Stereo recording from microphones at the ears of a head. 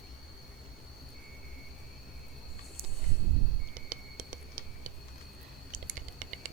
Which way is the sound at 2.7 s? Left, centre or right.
Right.